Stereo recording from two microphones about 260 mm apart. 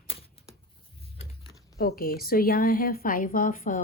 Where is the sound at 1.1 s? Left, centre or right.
Centre.